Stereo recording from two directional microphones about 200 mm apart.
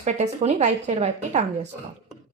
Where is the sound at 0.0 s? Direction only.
35° right (ahead or behind).